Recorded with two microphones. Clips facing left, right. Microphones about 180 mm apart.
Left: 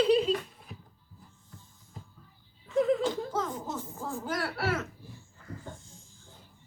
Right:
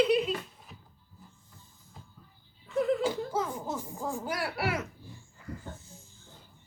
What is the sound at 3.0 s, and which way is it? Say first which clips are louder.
Speech: even; 10° right (ahead or behind).